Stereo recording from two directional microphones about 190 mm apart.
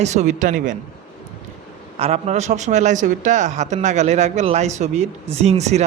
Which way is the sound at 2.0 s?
35° right (ahead or behind).